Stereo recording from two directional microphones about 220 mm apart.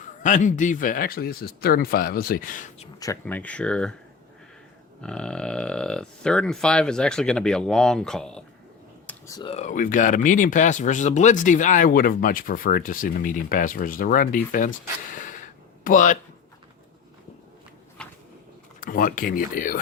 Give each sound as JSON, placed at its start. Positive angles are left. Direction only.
{"t": 0.2, "sound": "speech", "side_deg": 35}
{"t": 3.0, "sound": "speech", "side_deg": 10}
{"t": 5.0, "sound": "speech", "side_deg": 5}
{"t": 9.0, "sound": "a sound", "side_deg": 15}
{"t": 9.5, "sound": "speech", "side_deg": 30}
{"t": 18.8, "sound": "speech", "side_deg": 40}